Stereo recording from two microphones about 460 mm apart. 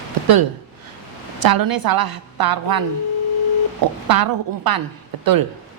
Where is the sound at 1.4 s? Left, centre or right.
Right.